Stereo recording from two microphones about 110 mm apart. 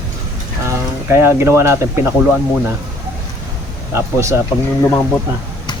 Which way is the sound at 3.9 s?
25° right (ahead or behind).